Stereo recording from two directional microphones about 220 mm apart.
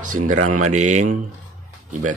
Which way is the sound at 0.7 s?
35° right (ahead or behind).